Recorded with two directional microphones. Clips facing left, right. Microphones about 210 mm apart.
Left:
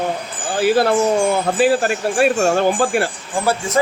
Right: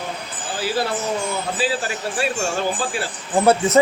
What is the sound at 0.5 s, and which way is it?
Speech, 55° left (ahead or behind).